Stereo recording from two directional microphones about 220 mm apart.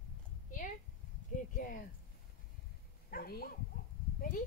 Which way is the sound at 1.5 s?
40° left (ahead or behind).